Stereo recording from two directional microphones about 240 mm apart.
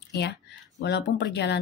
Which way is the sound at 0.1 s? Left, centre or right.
Left.